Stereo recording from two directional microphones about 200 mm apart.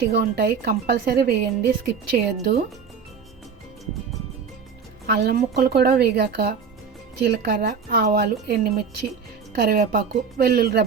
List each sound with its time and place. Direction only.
0.1 s speech: 50° right (ahead or behind)
5.0 s speech: 50° right (ahead or behind)